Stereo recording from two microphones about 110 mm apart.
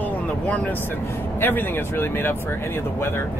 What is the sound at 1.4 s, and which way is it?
Speech, 20° left (ahead or behind).